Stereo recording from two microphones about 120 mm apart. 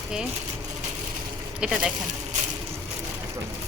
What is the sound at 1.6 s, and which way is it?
Speech, 5° right (ahead or behind).